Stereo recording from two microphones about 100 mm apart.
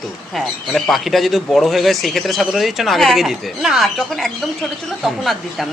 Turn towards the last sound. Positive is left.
turn(degrees=0)  # may be behind; listen again after turning